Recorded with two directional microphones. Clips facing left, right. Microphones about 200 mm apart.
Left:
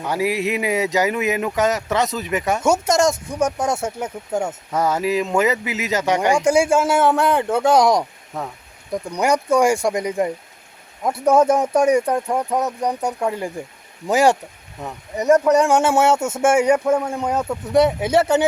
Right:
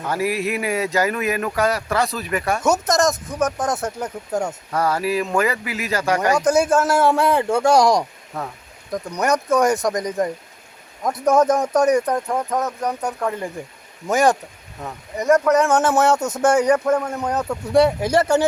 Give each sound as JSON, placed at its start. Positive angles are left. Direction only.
{"t": 0.0, "sound": "speech", "side_deg": 15}
{"t": 2.7, "sound": "a man's voice", "side_deg": 10}
{"t": 4.7, "sound": "a man's voice", "side_deg": 20}